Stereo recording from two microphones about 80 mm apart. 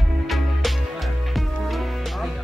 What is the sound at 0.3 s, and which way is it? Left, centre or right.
Music, centre.